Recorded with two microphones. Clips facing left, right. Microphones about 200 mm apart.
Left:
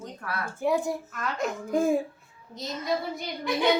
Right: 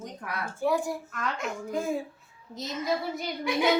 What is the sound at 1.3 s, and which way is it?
Speech, 45° left (ahead or behind).